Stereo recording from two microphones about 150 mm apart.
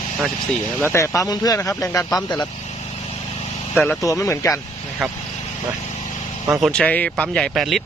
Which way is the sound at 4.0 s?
20° left (ahead or behind).